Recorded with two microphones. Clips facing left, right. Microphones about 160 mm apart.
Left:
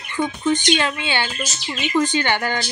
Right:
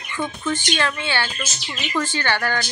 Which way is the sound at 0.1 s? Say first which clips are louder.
Left 5 dB; 20° left (ahead or behind).